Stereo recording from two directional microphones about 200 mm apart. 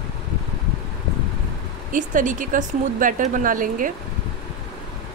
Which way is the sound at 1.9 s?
40° right (ahead or behind).